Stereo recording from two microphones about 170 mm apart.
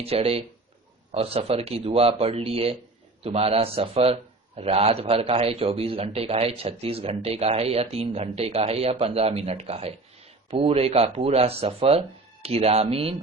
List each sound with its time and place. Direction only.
0.0 s a man's voice: 35° right (ahead or behind)